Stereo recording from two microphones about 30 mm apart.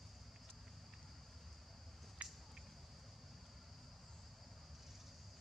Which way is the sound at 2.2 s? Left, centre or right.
Right.